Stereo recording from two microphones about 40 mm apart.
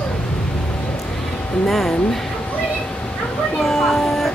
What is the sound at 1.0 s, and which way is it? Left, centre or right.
Music, centre.